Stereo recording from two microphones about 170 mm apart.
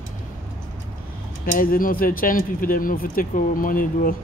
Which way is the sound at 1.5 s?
55° left (ahead or behind).